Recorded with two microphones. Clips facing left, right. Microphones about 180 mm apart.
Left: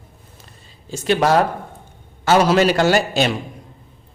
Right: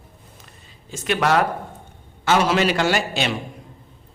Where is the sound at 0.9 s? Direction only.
30° left (ahead or behind).